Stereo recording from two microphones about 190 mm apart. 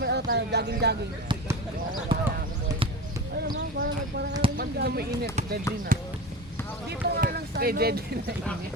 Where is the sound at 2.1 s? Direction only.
25° right (ahead or behind).